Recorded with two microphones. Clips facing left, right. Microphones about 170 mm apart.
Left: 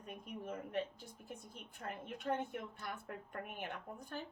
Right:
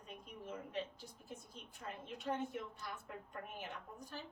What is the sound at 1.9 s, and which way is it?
A woman's voice, 55° left (ahead or behind).